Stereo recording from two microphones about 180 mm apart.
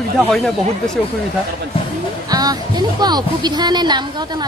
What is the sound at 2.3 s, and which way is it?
Speech, 20° right (ahead or behind).